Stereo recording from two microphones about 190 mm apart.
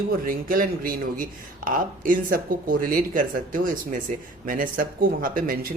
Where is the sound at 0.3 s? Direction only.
50° right (ahead or behind).